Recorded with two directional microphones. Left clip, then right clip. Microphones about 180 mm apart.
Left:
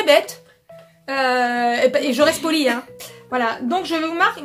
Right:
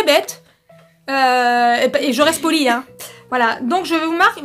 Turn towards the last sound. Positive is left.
turn(degrees=-45)  # may be behind; listen again after turning